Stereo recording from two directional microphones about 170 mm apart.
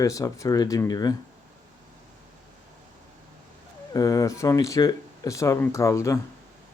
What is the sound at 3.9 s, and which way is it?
A man's voice, 20° left (ahead or behind).